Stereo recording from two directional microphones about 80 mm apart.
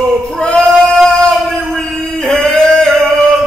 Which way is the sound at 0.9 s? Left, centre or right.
Centre.